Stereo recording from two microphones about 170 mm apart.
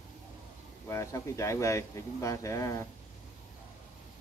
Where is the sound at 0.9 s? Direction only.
15° left (ahead or behind).